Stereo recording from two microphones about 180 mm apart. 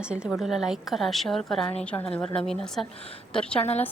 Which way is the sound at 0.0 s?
5° right (ahead or behind).